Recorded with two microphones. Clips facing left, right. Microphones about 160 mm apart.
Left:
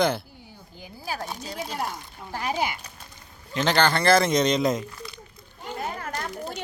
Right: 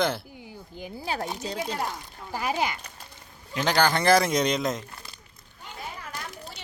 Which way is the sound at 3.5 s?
10° right (ahead or behind).